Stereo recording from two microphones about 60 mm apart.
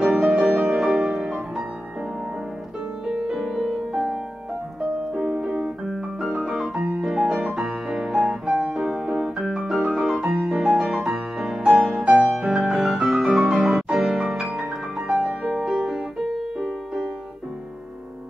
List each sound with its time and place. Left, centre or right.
0.0 s music: centre
3.3 s music: centre
5.1 s piano: centre
10.4 s music: centre
15.2 s music: right
15.6 s music: centre